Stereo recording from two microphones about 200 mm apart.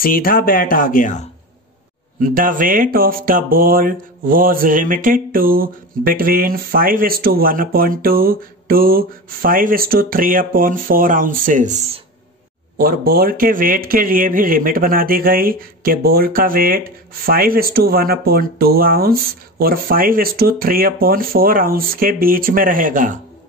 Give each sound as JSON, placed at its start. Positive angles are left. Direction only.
{"t": 0.0, "sound": "speech", "side_deg": 45}
{"t": 2.1, "sound": "speech", "side_deg": -45}